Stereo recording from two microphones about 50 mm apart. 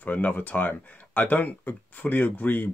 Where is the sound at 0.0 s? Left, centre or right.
Left.